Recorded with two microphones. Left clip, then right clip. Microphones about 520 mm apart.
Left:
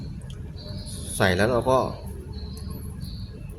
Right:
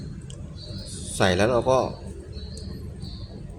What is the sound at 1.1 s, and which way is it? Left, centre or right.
Speech, left.